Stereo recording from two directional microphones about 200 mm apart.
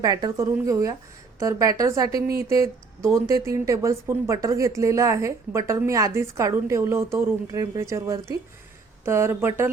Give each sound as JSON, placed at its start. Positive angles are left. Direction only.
{"t": 0.0, "sound": "a woman's voice", "side_deg": -20}